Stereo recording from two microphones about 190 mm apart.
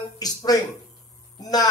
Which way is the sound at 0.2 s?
20° left (ahead or behind).